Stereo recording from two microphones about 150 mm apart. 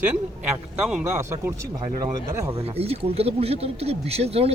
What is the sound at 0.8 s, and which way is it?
Speech, 5° right (ahead or behind).